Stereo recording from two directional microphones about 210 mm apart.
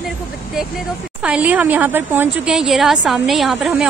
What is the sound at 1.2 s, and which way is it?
Speech, 5° right (ahead or behind).